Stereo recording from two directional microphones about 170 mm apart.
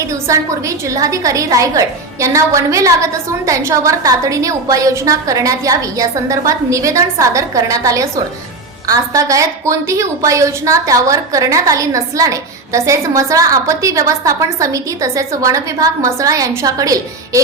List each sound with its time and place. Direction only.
0.1 s a woman's voice: 20° right (ahead or behind)